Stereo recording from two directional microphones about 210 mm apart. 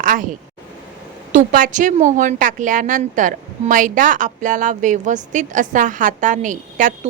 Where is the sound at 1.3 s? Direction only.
40° right (ahead or behind).